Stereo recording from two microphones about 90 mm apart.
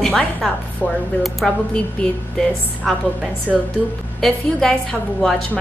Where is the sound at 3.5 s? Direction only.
5° right (ahead or behind).